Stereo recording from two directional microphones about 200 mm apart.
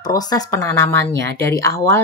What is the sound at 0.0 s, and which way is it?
Speech, 20° left (ahead or behind).